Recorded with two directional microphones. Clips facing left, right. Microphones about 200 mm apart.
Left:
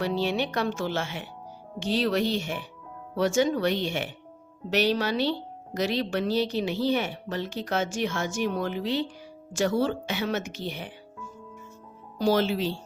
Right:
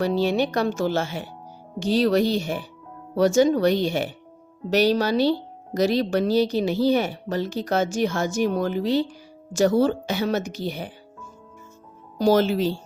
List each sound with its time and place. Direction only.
0.0 s speech: 40° right (ahead or behind)
12.2 s speech: 45° right (ahead or behind)